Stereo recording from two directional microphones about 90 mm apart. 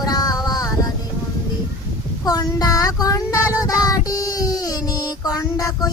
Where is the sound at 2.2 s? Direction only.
45° left (ahead or behind).